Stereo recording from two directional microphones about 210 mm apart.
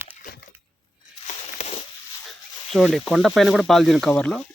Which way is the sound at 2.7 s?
Centre (ahead or behind).